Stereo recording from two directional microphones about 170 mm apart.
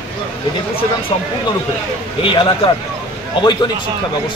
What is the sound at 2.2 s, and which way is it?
A man's voice, 30° left (ahead or behind).